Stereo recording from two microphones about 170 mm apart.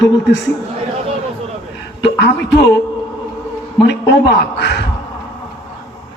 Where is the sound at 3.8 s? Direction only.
75° left (ahead or behind).